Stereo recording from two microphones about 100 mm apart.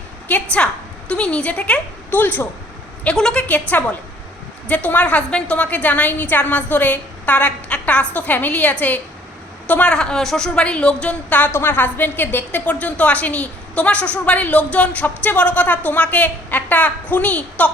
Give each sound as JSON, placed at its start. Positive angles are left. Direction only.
{"t": 0.3, "sound": "a woman's voice", "side_deg": 15}
{"t": 3.0, "sound": "a woman's voice", "side_deg": 10}